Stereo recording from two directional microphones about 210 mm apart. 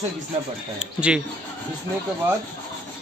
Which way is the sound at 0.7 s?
5° right (ahead or behind).